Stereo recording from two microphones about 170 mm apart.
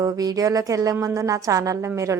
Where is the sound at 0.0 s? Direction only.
20° right (ahead or behind).